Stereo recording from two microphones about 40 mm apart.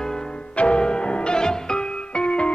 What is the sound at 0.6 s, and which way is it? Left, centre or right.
Music, left.